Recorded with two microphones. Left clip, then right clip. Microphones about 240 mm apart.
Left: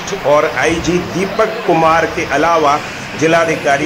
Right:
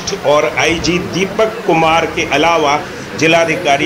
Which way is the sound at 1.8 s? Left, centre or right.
Centre.